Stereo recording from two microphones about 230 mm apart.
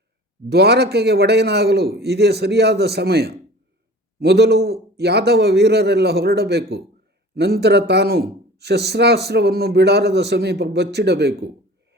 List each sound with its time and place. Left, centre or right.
0.5 s speech: right